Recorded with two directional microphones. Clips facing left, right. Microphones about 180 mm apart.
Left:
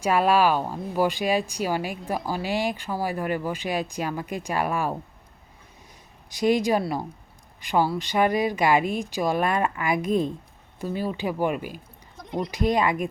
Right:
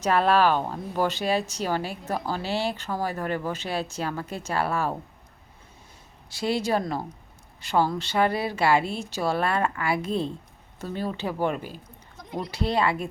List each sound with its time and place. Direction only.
0.0 s speech: 10° left (ahead or behind)
6.3 s speech: 15° left (ahead or behind)
12.1 s bleat: centre (ahead or behind)
12.5 s speech: 15° left (ahead or behind)